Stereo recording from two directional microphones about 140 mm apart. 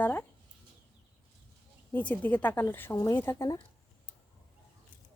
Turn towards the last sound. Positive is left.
turn(degrees=20)  # may be behind; listen again after turning